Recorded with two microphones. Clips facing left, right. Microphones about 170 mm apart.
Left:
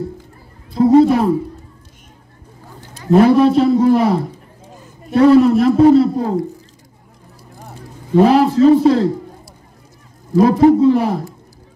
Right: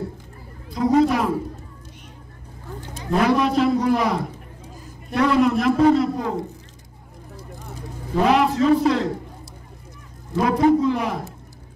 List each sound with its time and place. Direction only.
0.9 s a man's voice: 30° left (ahead or behind)
3.1 s a man's voice: 30° left (ahead or behind)
8.2 s a man's voice: 35° left (ahead or behind)
10.4 s a man's voice: 35° left (ahead or behind)